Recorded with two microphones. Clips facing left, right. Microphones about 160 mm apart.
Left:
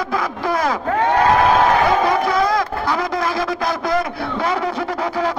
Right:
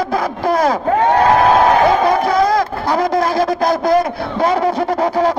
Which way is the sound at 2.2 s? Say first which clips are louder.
Right 4 dB; 35° right (ahead or behind).